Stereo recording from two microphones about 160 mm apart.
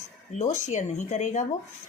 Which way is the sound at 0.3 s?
45° left (ahead or behind).